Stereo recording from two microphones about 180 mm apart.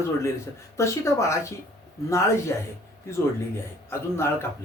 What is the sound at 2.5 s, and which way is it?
Speech, 10° left (ahead or behind).